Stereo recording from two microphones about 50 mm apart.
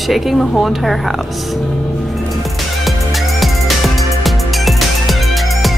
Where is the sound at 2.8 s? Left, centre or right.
Centre.